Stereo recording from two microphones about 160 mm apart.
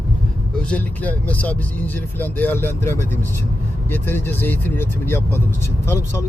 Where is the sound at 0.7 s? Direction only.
10° left (ahead or behind).